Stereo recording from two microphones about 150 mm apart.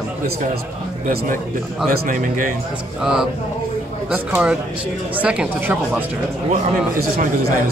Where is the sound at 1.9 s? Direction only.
65° right (ahead or behind).